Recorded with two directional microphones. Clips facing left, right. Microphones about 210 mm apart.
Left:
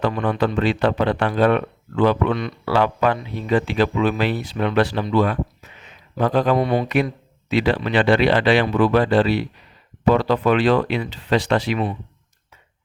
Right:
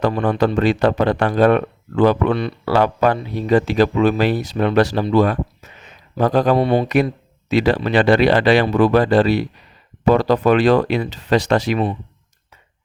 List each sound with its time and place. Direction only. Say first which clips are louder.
0.0 s speech: right 3 dB; 40° right (ahead or behind)